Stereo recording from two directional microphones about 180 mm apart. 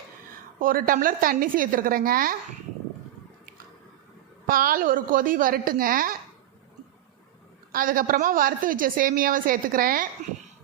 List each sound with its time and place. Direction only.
0.6 s a woman's voice: 50° right (ahead or behind)
4.4 s a woman's voice: 55° right (ahead or behind)
7.7 s a woman's voice: 50° right (ahead or behind)